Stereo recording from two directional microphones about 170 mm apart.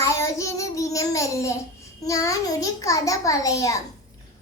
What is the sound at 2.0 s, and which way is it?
A child's voice, 20° left (ahead or behind).